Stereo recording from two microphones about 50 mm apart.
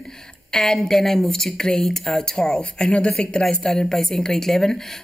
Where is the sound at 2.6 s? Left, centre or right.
Left.